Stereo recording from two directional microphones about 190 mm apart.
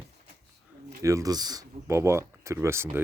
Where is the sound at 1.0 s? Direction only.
15° right (ahead or behind).